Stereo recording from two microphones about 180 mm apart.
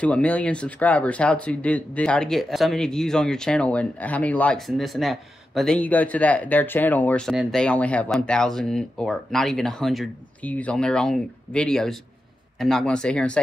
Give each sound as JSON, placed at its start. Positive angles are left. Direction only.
{"t": 0.0, "sound": "speech", "side_deg": 5}